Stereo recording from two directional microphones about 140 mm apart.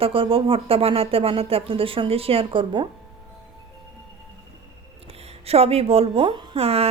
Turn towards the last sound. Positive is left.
turn(degrees=-45)  # may be behind; listen again after turning